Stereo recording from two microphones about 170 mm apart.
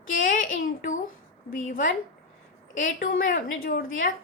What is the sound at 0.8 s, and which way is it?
A woman's voice, 50° left (ahead or behind).